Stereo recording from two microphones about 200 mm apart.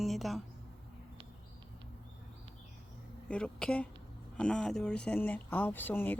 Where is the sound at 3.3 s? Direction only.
5° left (ahead or behind).